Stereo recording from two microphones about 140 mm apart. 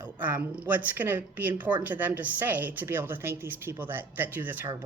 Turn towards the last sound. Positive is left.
turn(degrees=-15)  # may be behind; listen again after turning